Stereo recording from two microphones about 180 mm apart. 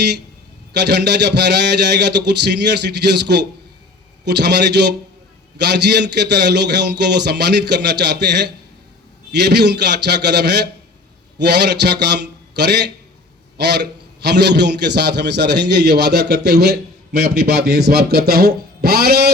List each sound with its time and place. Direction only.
0.7 s a man's voice: 70° right (ahead or behind); by 17.5 s 55° right (ahead or behind)
17.6 s a man's voice: 65° right (ahead or behind)